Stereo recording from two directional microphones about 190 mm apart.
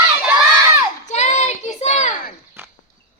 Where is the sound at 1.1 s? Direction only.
35° left (ahead or behind).